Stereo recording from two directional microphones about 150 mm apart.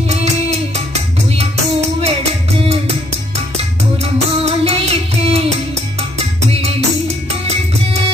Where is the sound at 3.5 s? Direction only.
45° right (ahead or behind).